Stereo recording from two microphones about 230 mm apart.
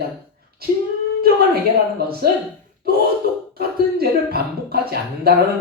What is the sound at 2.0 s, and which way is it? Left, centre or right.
Speech, right.